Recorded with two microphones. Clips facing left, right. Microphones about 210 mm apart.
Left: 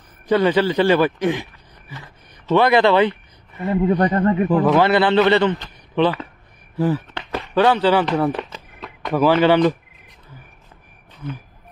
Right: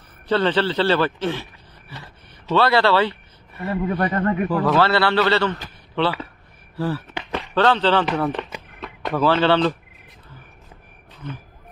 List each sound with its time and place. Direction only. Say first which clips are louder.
0.3 s a man's voice: left 3 dB; 10° left (ahead or behind)
7.1 s chopping: right 1 dB; 10° right (ahead or behind)
7.5 s speech: left 2 dB; 10° left (ahead or behind)
8.7 s a sound: right 1 dB; centre (ahead or behind)
9.1 s speech: left 3 dB; 15° left (ahead or behind)